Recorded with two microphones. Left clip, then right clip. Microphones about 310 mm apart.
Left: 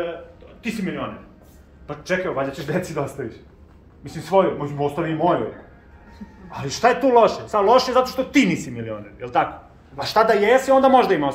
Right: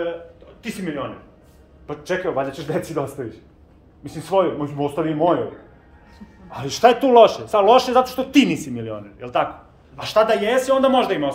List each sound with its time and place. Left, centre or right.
1.9 s speech: right
6.5 s speech: right
9.2 s speech: centre